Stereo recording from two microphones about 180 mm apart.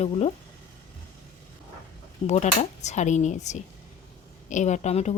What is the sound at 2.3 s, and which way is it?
Speech, 40° left (ahead or behind).